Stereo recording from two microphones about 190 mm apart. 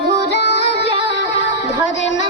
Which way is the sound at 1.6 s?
75° left (ahead or behind).